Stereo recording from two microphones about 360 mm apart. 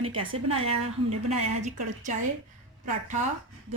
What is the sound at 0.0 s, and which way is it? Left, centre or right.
Speech, right.